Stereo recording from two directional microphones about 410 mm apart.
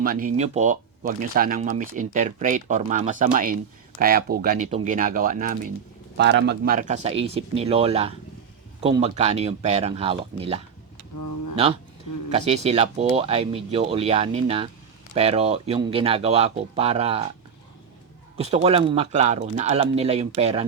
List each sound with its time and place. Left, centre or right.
0.0 s speech: centre
11.2 s a sound: left
12.5 s speech: centre
18.3 s speech: centre